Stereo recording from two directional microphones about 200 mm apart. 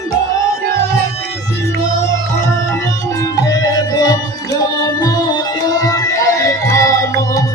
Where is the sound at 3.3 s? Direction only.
20° left (ahead or behind).